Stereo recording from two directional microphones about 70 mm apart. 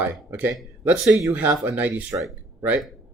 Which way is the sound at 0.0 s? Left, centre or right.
Right.